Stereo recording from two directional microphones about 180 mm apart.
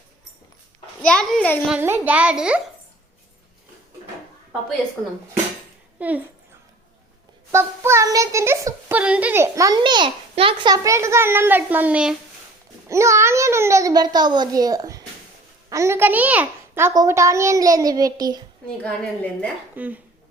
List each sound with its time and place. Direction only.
1.0 s a child's voice: 5° left (ahead or behind)
1.6 s a child's voice: 10° right (ahead or behind)
6.0 s a child's voice: 10° right (ahead or behind)
7.5 s a child's voice: 15° right (ahead or behind)
18.8 s a woman's voice: 5° left (ahead or behind)
19.7 s a child's voice: 10° right (ahead or behind)